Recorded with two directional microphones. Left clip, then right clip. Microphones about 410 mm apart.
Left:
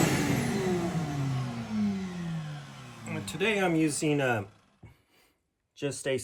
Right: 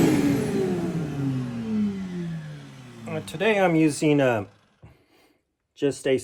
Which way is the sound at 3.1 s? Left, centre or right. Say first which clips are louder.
Right 6 dB; centre.